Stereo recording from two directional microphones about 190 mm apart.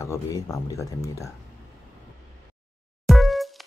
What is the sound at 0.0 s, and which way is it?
Speech, 15° left (ahead or behind).